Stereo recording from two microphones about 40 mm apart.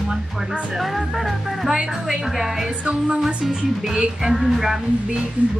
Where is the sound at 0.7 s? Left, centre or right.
Centre.